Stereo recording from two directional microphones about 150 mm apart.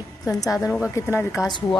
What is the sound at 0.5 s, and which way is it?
Speech, centre (ahead or behind).